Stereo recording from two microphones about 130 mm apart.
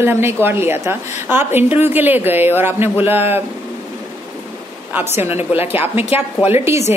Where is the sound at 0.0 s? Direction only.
20° right (ahead or behind).